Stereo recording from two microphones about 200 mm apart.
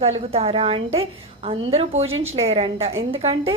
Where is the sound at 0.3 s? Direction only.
30° right (ahead or behind).